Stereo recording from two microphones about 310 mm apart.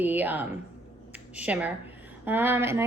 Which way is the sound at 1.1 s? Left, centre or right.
Centre.